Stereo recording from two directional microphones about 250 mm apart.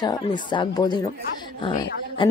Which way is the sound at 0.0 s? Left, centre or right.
Centre.